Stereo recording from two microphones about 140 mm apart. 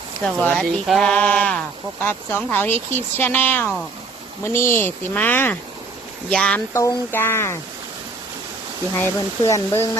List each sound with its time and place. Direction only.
0.2 s speech: 5° left (ahead or behind)
6.7 s speech: 20° left (ahead or behind)
9.0 s speech: 20° left (ahead or behind)